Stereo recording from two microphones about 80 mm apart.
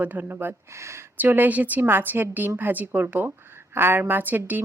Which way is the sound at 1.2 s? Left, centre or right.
Right.